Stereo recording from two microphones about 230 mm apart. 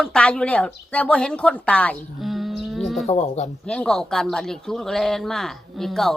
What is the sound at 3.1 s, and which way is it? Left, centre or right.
Speech, left.